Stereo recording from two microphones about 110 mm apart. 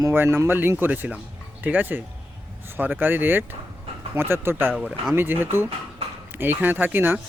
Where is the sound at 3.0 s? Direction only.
20° right (ahead or behind).